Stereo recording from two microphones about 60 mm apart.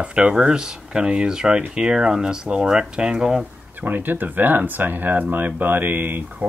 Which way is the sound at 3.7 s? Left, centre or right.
Right.